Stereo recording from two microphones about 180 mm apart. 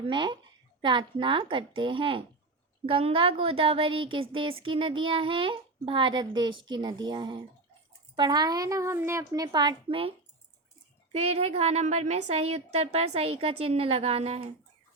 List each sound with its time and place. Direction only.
0.0 s speech: 25° right (ahead or behind)
11.1 s a woman's voice: 35° right (ahead or behind)